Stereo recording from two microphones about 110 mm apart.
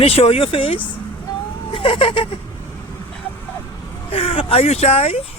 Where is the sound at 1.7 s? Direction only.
50° left (ahead or behind).